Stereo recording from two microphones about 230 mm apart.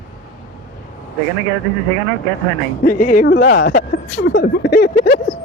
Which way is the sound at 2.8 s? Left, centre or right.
Left.